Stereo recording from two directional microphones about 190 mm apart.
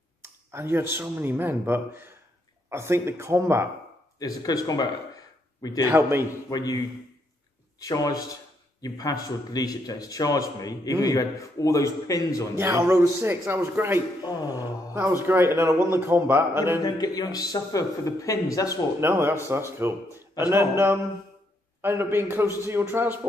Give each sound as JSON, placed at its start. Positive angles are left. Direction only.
{"t": 0.2, "sound": "speech", "side_deg": -15}
{"t": 4.2, "sound": "a man's voice", "side_deg": 20}
{"t": 5.9, "sound": "speech", "side_deg": -10}
{"t": 6.5, "sound": "a man's voice", "side_deg": 20}
{"t": 7.8, "sound": "a man's voice", "side_deg": 20}
{"t": 12.5, "sound": "speech", "side_deg": -15}
{"t": 14.2, "sound": "a man's voice", "side_deg": 20}
{"t": 15.2, "sound": "speech", "side_deg": -15}
{"t": 16.8, "sound": "a man's voice", "side_deg": 20}
{"t": 18.9, "sound": "speech", "side_deg": -15}